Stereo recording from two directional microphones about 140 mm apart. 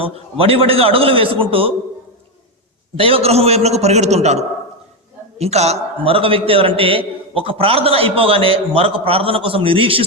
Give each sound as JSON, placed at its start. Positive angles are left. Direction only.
{"t": 0.0, "sound": "a man's voice", "side_deg": -40}
{"t": 2.9, "sound": "a man's voice", "side_deg": -40}